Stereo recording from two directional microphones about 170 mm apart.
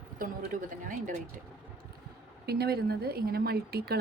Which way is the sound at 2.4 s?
65° right (ahead or behind).